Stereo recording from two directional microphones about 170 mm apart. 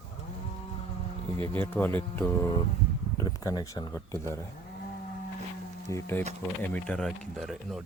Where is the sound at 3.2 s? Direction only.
20° left (ahead or behind).